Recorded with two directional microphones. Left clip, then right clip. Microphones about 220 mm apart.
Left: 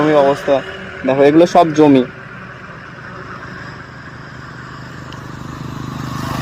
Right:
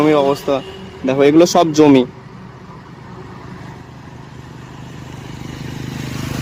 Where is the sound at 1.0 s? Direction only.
5° right (ahead or behind).